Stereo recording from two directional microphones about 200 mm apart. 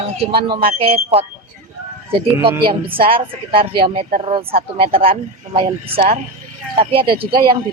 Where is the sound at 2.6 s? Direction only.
25° right (ahead or behind).